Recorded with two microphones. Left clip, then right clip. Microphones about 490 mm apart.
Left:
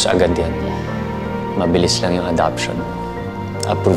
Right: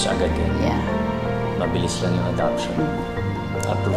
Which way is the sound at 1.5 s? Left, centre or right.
Left.